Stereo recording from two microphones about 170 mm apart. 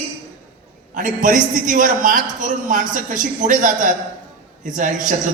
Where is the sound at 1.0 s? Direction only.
50° right (ahead or behind).